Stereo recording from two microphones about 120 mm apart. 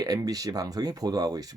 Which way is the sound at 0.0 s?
30° right (ahead or behind).